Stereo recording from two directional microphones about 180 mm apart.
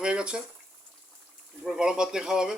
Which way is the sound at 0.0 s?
5° right (ahead or behind).